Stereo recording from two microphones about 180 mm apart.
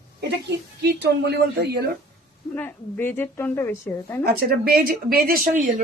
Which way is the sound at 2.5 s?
10° left (ahead or behind).